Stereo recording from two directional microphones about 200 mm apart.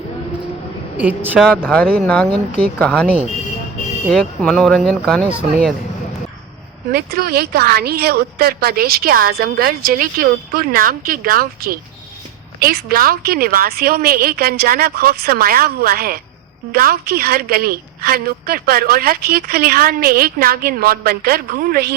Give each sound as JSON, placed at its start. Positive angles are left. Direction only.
{"t": 0.9, "sound": "speech", "side_deg": -10}
{"t": 1.6, "sound": "speech", "side_deg": 5}
{"t": 4.1, "sound": "speech", "side_deg": 5}
{"t": 6.9, "sound": "a woman's voice", "side_deg": -50}